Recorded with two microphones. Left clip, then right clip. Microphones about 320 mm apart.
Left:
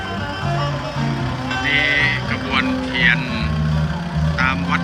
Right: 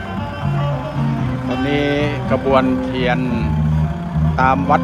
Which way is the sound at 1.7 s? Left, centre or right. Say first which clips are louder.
Left 3 dB; centre.